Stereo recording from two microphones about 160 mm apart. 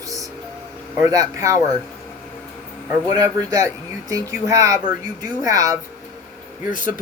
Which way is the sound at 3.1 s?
25° right (ahead or behind).